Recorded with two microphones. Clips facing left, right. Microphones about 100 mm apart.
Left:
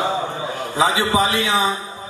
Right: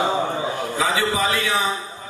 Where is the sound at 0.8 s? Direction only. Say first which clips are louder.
Left 4 dB; 20° left (ahead or behind).